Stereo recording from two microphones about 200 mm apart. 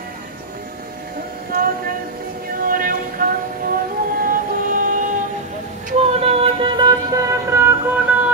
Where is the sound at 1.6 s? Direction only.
50° right (ahead or behind).